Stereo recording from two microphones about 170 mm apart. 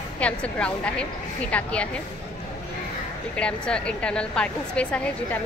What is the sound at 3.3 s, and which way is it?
A woman's voice, 5° left (ahead or behind).